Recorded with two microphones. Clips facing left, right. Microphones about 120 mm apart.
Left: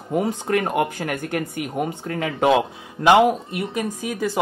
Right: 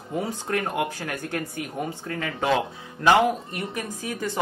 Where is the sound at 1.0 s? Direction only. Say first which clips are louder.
Left 5 dB; 15° left (ahead or behind).